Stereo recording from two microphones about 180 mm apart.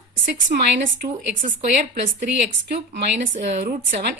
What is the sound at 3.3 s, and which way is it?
Speech, 40° right (ahead or behind).